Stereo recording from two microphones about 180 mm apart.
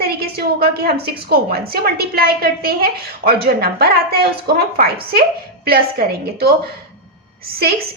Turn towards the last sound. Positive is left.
turn(degrees=-60)  # may be behind; listen again after turning